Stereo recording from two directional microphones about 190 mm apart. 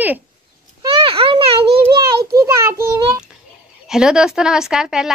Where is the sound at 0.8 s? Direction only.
30° right (ahead or behind).